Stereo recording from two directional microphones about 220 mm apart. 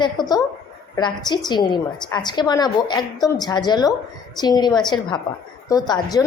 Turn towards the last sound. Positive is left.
turn(degrees=15)  # may be behind; listen again after turning